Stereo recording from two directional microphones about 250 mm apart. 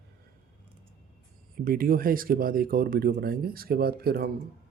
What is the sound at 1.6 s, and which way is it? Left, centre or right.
Speech, right.